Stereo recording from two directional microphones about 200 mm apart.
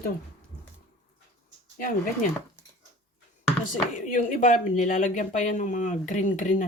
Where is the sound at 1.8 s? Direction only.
45° left (ahead or behind).